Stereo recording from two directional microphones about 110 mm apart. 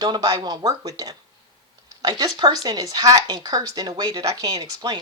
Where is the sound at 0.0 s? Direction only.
35° right (ahead or behind).